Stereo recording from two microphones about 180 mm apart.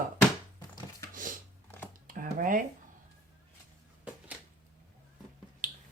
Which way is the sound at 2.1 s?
50° right (ahead or behind).